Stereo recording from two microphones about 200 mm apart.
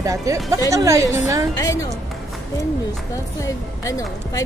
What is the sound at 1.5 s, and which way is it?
Speech, 20° left (ahead or behind).